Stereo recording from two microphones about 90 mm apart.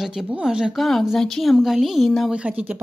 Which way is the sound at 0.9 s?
5° left (ahead or behind).